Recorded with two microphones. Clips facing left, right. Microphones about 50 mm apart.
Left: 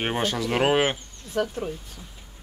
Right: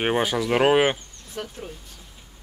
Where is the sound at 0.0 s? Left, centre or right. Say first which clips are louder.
Right 3 dB; centre.